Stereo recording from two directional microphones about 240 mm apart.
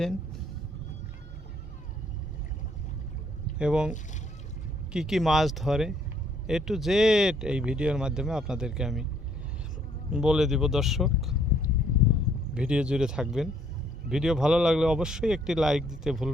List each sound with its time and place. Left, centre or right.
3.6 s speech: centre
10.1 s speech: centre
11.8 s boat: left
12.5 s speech: centre